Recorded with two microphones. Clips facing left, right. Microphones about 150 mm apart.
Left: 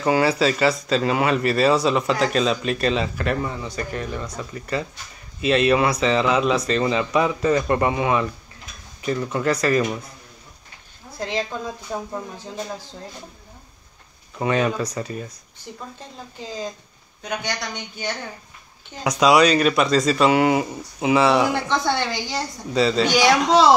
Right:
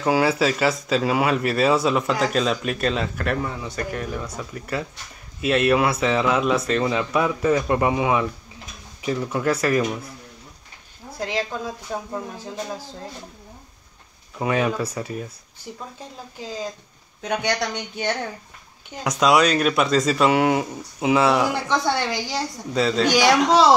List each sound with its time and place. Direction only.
0.0 s speech: 5° right (ahead or behind)
11.1 s a woman's voice: 5° right (ahead or behind)
14.4 s speech: 5° right (ahead or behind)
17.5 s speech: 70° right (ahead or behind)
19.0 s speech: centre (ahead or behind)